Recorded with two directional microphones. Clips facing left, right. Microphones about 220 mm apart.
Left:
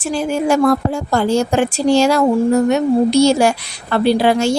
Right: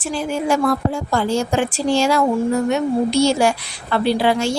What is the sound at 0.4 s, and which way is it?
A woman's voice, 45° left (ahead or behind).